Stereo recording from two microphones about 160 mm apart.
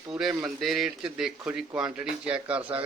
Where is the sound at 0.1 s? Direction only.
Centre (ahead or behind).